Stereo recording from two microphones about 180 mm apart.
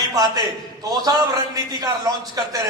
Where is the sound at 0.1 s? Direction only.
20° right (ahead or behind).